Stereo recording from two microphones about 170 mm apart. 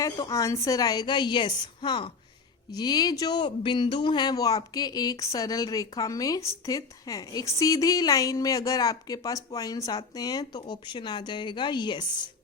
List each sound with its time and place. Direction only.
0.0 s speech: 20° left (ahead or behind)